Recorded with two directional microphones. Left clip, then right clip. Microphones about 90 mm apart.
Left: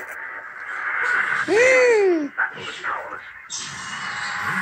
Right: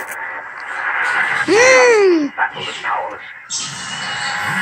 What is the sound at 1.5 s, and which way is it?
Babbling, 35° right (ahead or behind).